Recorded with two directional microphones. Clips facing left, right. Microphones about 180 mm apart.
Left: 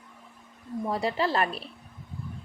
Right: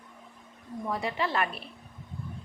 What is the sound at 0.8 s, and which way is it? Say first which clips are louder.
Speech: left 3 dB; 35° left (ahead or behind).